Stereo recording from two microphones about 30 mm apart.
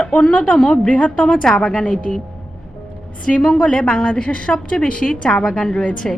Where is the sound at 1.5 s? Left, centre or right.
Centre.